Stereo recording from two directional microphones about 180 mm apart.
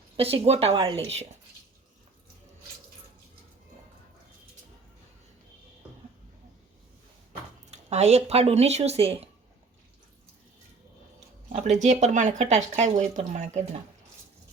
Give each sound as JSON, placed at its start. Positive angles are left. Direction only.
{"t": 0.2, "sound": "speech", "side_deg": -35}
{"t": 7.7, "sound": "speech", "side_deg": -35}
{"t": 11.4, "sound": "speech", "side_deg": -40}